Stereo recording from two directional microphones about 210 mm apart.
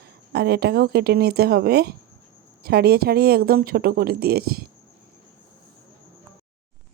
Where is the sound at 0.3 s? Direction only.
50° right (ahead or behind).